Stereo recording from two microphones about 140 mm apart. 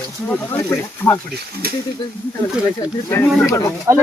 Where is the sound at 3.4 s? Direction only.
25° left (ahead or behind).